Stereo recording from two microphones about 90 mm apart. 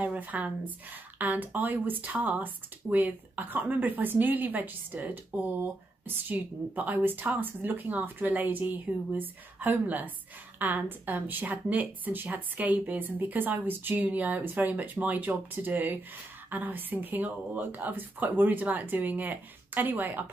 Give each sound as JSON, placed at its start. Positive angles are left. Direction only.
{"t": 0.0, "sound": "a woman's voice", "side_deg": -15}